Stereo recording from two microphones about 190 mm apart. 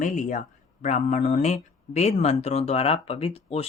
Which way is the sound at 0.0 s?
40° left (ahead or behind).